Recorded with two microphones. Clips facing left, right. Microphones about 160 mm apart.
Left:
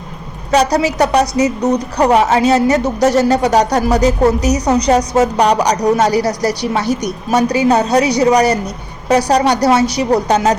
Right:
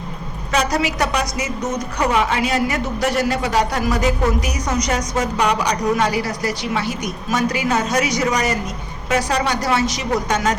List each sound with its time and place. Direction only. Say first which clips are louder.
0.5 s a woman's voice: left 7 dB; 35° left (ahead or behind)